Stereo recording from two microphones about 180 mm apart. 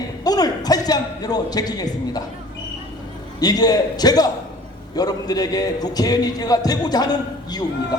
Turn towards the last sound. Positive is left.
turn(degrees=20)  # may be behind; listen again after turning